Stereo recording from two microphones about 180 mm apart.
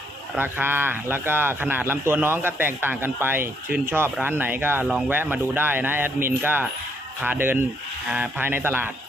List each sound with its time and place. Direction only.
0.4 s a man's voice: 10° right (ahead or behind)